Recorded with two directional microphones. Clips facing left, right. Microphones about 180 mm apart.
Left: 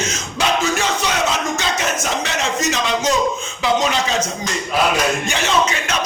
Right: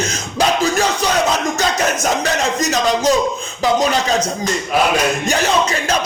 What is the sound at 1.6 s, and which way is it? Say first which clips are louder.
Speech: right 4 dB; 40° right (ahead or behind).